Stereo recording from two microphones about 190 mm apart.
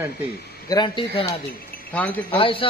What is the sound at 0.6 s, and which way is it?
Speech, 25° left (ahead or behind).